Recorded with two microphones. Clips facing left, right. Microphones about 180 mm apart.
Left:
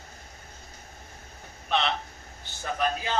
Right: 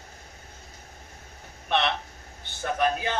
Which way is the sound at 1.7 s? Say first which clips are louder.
Right 1 dB; 60° right (ahead or behind).